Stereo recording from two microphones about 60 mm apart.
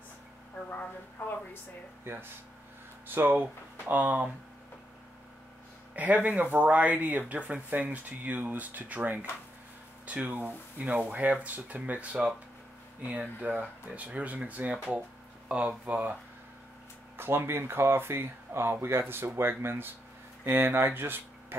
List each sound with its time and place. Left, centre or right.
1.2 s speech: left
2.1 s speech: right
5.9 s speech: right
17.2 s speech: right